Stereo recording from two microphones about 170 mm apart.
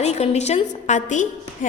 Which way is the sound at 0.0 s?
40° left (ahead or behind).